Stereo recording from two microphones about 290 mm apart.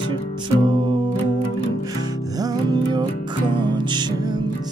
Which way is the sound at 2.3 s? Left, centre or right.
Centre.